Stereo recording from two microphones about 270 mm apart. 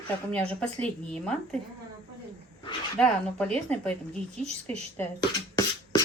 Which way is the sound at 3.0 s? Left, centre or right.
Centre.